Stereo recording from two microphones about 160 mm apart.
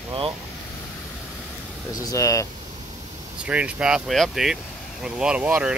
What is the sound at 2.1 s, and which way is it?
Speech, 20° left (ahead or behind).